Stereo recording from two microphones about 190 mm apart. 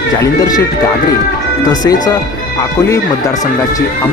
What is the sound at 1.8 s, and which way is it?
Speech, 15° left (ahead or behind).